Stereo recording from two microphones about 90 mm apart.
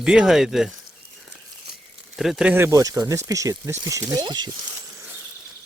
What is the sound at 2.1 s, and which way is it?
Speech, 5° right (ahead or behind).